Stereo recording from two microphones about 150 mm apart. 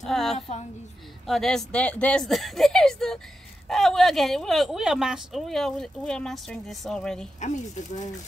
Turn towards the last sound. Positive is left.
turn(degrees=50)  # may be behind; listen again after turning